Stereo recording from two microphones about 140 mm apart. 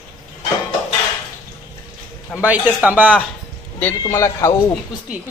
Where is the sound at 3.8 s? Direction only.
15° left (ahead or behind).